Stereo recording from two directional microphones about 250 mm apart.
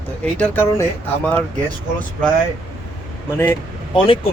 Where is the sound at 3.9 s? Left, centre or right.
Centre.